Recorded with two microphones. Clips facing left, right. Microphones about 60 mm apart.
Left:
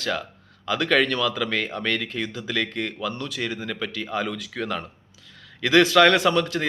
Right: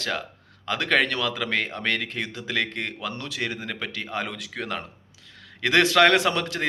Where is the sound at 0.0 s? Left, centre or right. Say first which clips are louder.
Left 2 dB; right.